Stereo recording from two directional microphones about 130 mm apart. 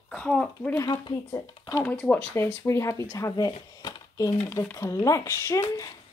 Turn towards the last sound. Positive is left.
turn(degrees=20)  # may be behind; listen again after turning